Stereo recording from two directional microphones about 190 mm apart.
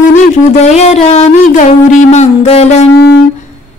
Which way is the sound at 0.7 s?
35° left (ahead or behind).